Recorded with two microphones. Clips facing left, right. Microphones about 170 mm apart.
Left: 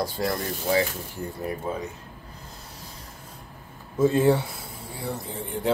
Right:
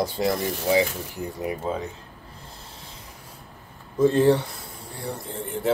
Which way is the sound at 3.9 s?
5° left (ahead or behind).